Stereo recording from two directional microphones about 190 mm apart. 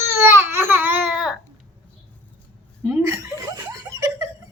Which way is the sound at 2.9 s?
10° right (ahead or behind).